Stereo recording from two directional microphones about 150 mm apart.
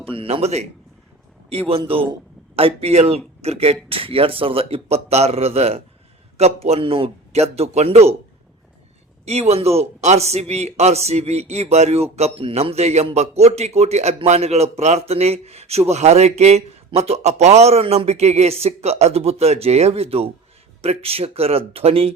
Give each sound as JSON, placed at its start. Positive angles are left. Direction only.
{"t": 0.0, "sound": "a man's voice", "side_deg": -40}
{"t": 9.2, "sound": "a man's voice", "side_deg": -45}